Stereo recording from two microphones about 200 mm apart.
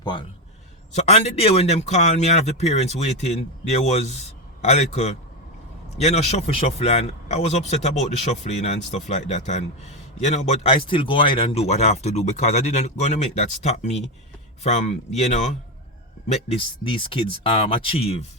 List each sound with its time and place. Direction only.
0.0 s a man's voice: 20° left (ahead or behind)